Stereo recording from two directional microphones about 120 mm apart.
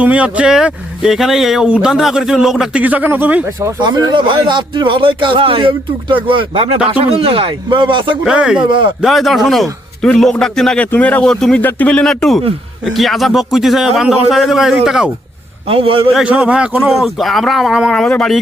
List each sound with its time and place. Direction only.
0.0 s speech: 10° right (ahead or behind)
3.8 s speech: 35° right (ahead or behind)
8.2 s speech: 5° right (ahead or behind)
8.6 s speech: 45° right (ahead or behind)
9.0 s speech: centre (ahead or behind)
15.6 s speech: 50° right (ahead or behind)
16.1 s speech: 10° right (ahead or behind); by 18.3 s 5° left (ahead or behind)